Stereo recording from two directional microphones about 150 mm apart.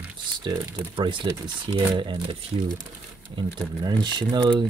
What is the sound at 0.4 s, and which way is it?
Speech, 30° right (ahead or behind).